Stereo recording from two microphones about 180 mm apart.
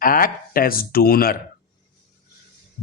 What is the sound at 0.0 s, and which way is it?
Speech, 55° left (ahead or behind).